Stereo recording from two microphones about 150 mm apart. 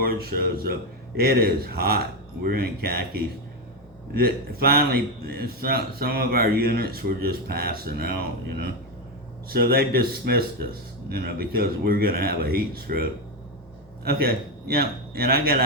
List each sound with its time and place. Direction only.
0.0 s a man's voice: 85° right